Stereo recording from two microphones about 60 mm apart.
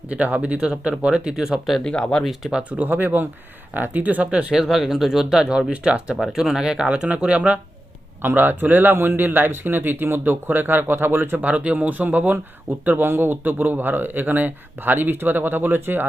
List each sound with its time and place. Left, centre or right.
0.1 s speech: right; by 1.8 s centre
1.8 s speech: centre
2.5 s speech: centre
2.7 s a man's voice: right
4.5 s speech: centre
8.2 s a man's voice: right
11.3 s a man's voice: right